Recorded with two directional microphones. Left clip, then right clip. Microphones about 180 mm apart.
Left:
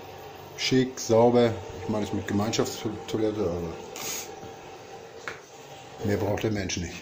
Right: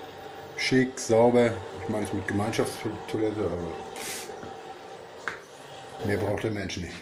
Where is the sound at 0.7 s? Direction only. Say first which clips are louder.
Left 1 dB; 5° left (ahead or behind).